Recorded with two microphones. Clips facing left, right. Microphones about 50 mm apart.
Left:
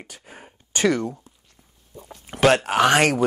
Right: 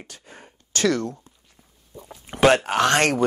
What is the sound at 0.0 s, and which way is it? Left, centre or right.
Speech, centre.